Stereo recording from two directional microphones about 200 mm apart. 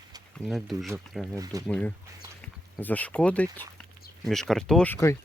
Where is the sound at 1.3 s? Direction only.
15° right (ahead or behind).